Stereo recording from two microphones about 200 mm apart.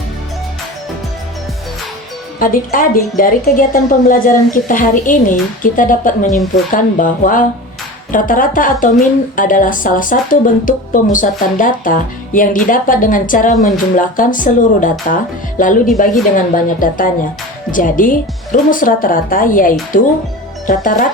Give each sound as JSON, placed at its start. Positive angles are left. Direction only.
{"t": 2.4, "sound": "a woman's voice", "side_deg": 45}